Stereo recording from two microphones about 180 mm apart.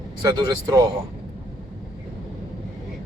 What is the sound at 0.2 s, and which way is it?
Speech, 20° right (ahead or behind).